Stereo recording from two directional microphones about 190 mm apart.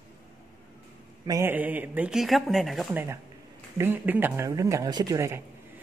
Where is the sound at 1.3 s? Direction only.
15° right (ahead or behind).